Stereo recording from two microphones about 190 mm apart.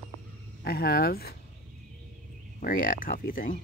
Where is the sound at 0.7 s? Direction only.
55° left (ahead or behind).